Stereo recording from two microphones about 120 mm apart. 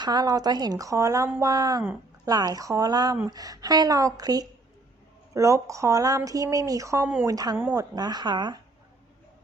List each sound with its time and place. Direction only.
0.0 s a woman's voice: 35° right (ahead or behind)